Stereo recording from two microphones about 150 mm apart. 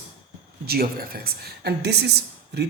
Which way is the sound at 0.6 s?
90° right.